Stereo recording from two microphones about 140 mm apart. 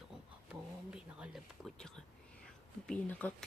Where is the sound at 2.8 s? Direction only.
10° left (ahead or behind).